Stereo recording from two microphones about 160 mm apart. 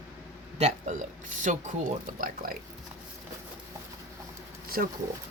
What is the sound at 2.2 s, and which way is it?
Speech, 65° right (ahead or behind).